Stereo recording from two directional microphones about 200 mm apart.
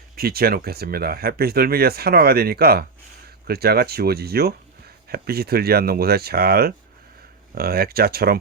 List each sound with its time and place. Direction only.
0.2 s speech: 50° right (ahead or behind)